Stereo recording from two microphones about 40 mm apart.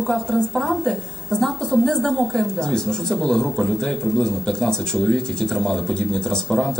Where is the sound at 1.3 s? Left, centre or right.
Centre.